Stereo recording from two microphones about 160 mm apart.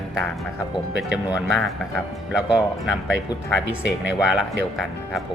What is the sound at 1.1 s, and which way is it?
Speech, centre (ahead or behind).